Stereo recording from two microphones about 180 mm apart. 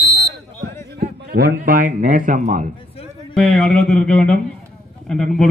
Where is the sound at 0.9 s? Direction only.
60° right (ahead or behind); by 2.7 s 45° right (ahead or behind).